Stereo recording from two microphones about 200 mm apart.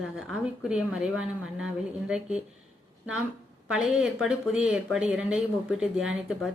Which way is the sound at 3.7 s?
Centre (ahead or behind).